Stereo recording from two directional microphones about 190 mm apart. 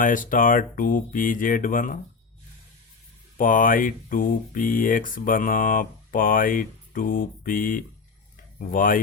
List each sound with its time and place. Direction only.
0.0 s speech: 45° left (ahead or behind)
3.3 s speech: 45° left (ahead or behind)